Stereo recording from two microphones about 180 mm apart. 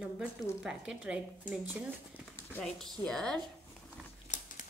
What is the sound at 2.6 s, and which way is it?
Speech, 5° left (ahead or behind).